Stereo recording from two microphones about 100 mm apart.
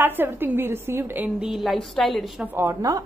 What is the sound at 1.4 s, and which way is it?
Speech, centre (ahead or behind).